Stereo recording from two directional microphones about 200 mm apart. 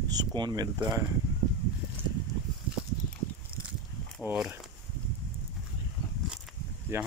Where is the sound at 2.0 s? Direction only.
10° right (ahead or behind).